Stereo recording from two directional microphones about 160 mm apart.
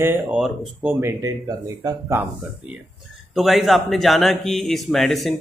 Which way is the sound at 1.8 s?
15° right (ahead or behind).